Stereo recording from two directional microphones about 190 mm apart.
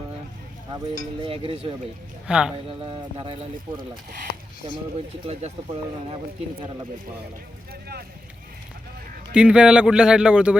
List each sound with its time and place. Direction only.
1.2 s speech: 30° right (ahead or behind)
2.2 s speech: 5° right (ahead or behind)
2.6 s speech: 30° right (ahead or behind)
7.7 s boat: 55° right (ahead or behind)
9.3 s speech: 5° right (ahead or behind)